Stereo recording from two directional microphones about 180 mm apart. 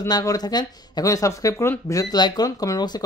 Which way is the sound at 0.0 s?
15° left (ahead or behind).